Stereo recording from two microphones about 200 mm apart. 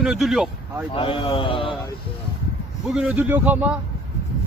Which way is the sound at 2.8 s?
5° right (ahead or behind).